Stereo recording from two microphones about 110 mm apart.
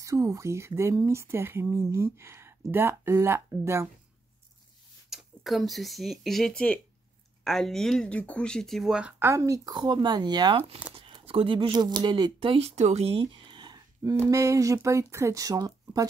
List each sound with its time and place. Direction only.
0.0 s speech: 30° right (ahead or behind)
5.1 s speech: centre (ahead or behind)
9.2 s speech: 25° right (ahead or behind)
9.8 s speech: 45° right (ahead or behind)
11.0 s speech: 55° right (ahead or behind); by 12.4 s 40° right (ahead or behind)
12.4 s speech: 60° right (ahead or behind); by 14.1 s 40° right (ahead or behind)
14.3 s speech: 30° right (ahead or behind)